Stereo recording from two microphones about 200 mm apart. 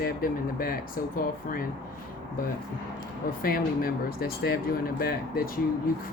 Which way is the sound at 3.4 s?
45° left (ahead or behind).